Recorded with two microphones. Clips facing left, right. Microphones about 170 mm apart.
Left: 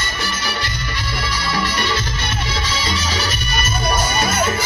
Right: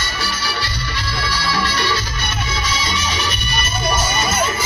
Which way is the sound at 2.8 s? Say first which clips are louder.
Even; 35° left (ahead or behind).